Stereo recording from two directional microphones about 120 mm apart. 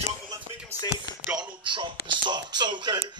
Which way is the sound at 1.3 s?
40° right (ahead or behind).